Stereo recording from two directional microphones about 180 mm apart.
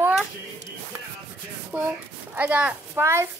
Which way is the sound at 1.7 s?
10° right (ahead or behind).